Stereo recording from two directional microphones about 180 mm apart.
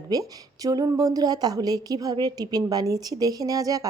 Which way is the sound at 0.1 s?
20° right (ahead or behind).